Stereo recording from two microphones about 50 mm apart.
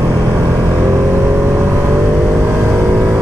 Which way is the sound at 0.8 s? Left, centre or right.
Right.